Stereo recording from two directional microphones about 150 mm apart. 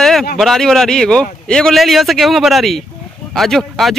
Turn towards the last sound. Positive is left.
turn(degrees=0)  # may be behind; listen again after turning